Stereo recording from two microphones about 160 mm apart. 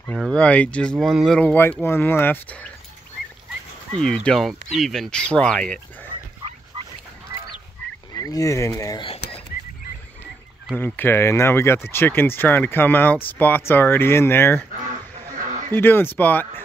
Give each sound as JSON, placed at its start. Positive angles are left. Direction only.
{"t": 0.0, "sound": "speech", "side_deg": 5}
{"t": 3.9, "sound": "speech", "side_deg": 5}
{"t": 8.2, "sound": "speech", "side_deg": 20}
{"t": 10.8, "sound": "speech", "side_deg": 15}
{"t": 15.3, "sound": "a sound", "side_deg": -50}
{"t": 15.7, "sound": "speech", "side_deg": 15}